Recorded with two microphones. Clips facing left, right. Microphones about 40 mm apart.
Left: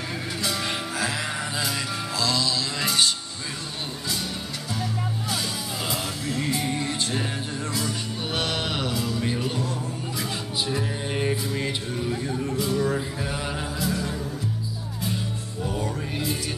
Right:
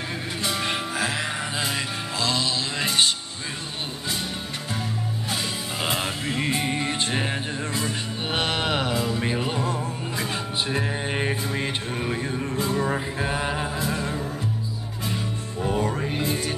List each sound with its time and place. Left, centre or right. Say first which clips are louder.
0.4 s music: right 2 dB; right
5.9 s music: right 4 dB; right
15.8 s music: right 3 dB; right